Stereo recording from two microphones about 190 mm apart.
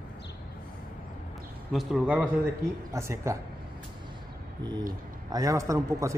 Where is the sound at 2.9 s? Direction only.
15° right (ahead or behind).